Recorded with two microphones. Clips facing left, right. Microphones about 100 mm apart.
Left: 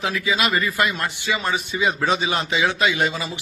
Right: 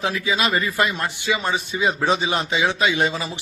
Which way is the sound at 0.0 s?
30° right (ahead or behind).